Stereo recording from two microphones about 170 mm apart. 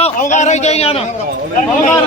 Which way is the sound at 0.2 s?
45° left (ahead or behind).